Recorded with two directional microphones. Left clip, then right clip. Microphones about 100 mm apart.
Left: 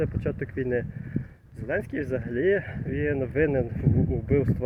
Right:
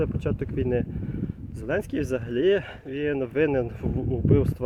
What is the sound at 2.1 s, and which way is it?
Speech, 45° right (ahead or behind).